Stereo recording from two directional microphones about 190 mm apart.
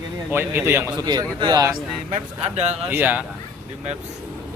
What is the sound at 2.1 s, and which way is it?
Speech, 35° right (ahead or behind).